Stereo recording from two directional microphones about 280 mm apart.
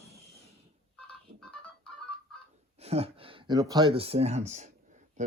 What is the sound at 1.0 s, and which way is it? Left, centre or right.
Telephone dialing, centre.